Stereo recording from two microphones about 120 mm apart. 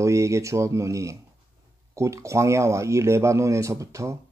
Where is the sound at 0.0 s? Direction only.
25° right (ahead or behind).